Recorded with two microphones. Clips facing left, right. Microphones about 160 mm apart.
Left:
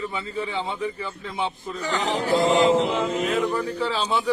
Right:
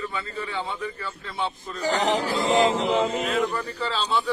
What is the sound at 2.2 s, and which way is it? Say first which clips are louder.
Mantra: left 5 dB; 45° left (ahead or behind).